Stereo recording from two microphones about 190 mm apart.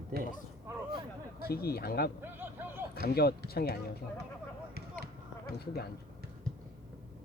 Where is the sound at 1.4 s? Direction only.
55° left (ahead or behind).